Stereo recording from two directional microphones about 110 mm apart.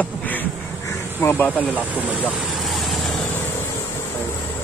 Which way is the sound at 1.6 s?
15° right (ahead or behind).